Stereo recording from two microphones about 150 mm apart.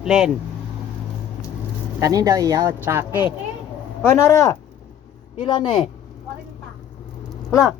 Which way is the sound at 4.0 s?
15° left (ahead or behind).